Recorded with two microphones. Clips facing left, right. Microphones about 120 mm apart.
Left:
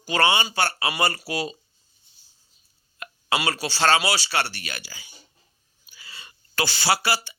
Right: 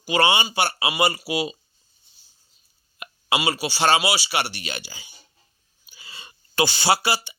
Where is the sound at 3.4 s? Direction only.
10° right (ahead or behind).